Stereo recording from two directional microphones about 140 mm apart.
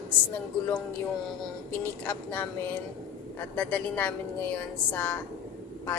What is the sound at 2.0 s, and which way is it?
A woman's voice, 15° left (ahead or behind).